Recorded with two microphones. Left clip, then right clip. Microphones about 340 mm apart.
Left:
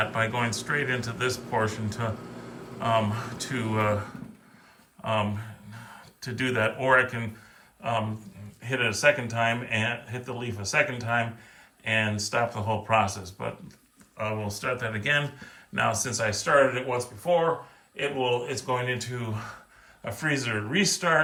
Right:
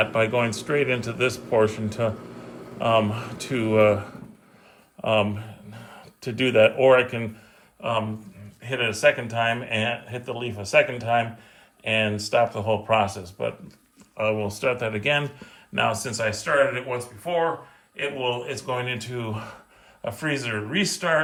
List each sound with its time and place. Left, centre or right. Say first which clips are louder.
0.0 s speech: right 5 dB; centre
5.0 s a sound: right 6 dB; centre
6.2 s speech: right 8 dB; centre